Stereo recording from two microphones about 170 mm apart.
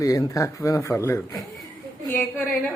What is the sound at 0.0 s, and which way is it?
A woman's voice, 20° left (ahead or behind).